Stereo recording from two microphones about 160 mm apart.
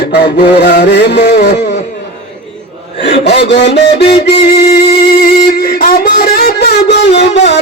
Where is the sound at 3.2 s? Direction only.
90° left.